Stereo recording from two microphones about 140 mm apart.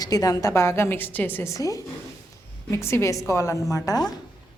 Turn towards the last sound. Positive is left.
turn(degrees=25)  # may be behind; listen again after turning